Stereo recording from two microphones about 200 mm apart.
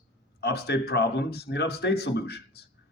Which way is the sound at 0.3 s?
55° left (ahead or behind).